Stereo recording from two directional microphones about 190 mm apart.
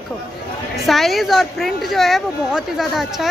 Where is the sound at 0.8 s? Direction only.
Centre (ahead or behind).